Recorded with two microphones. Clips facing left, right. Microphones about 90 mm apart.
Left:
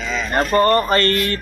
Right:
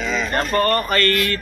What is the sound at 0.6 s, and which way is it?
Mantra, 25° left (ahead or behind).